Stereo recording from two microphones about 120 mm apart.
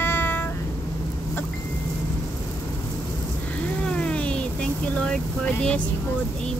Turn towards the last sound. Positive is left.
turn(degrees=10)  # may be behind; listen again after turning